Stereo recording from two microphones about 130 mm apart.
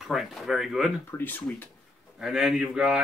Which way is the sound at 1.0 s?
15° left (ahead or behind).